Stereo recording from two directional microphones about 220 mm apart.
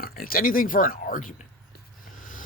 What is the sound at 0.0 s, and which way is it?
Speech, 40° left (ahead or behind).